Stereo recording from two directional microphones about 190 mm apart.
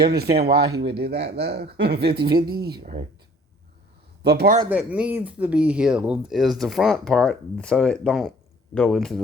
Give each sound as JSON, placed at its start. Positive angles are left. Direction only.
{"t": 0.3, "sound": "speech", "side_deg": -55}
{"t": 2.2, "sound": "speech", "side_deg": -20}
{"t": 4.2, "sound": "a man's voice", "side_deg": -60}
{"t": 4.7, "sound": "speech", "side_deg": -5}